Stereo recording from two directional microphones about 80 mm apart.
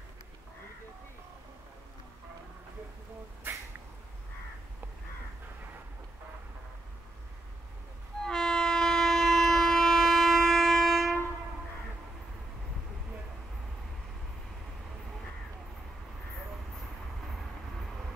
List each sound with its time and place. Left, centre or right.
3.4 s cat: right
8.2 s train: centre